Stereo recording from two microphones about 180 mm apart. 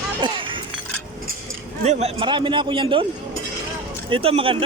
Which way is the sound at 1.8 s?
35° right (ahead or behind).